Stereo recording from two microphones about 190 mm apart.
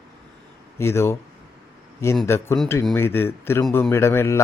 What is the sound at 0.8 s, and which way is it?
Speech, 15° left (ahead or behind).